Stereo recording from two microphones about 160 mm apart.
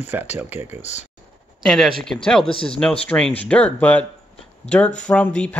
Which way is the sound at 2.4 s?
35° left (ahead or behind).